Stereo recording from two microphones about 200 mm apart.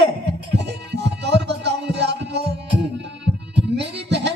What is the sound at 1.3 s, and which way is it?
Music, 60° right (ahead or behind).